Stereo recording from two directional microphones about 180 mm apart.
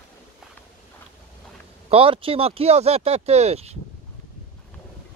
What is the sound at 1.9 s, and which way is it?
Speech, 30° right (ahead or behind).